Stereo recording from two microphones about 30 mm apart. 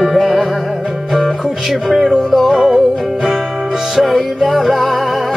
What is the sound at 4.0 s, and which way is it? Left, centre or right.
Music, centre.